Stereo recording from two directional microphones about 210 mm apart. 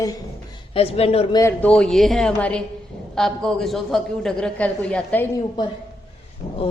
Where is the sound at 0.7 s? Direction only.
30° left (ahead or behind).